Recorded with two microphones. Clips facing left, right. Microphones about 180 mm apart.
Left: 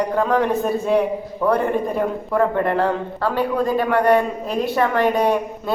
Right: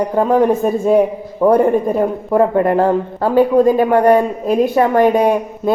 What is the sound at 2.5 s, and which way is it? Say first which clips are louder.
Speech: right 6 dB; 40° right (ahead or behind).